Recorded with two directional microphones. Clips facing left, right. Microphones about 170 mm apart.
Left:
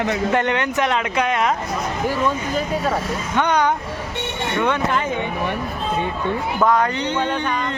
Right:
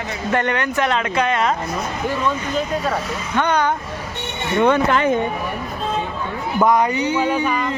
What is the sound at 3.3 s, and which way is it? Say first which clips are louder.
Speech: even; 15° left (ahead or behind).